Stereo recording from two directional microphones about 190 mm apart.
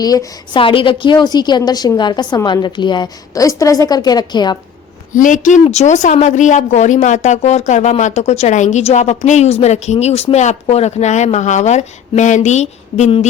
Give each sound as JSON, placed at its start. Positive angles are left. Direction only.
{"t": 0.0, "sound": "a woman's voice", "side_deg": 20}
{"t": 5.1, "sound": "a woman's voice", "side_deg": 40}